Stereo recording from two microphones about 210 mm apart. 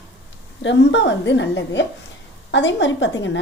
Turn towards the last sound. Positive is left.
turn(degrees=60)  # may be behind; listen again after turning